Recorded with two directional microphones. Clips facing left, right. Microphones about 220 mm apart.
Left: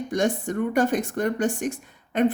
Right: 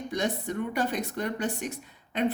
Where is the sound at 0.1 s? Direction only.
50° left (ahead or behind).